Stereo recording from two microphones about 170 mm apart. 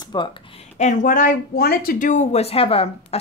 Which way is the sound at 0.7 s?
45° left (ahead or behind).